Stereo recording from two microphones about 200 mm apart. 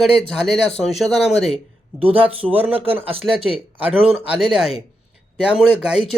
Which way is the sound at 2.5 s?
10° right (ahead or behind).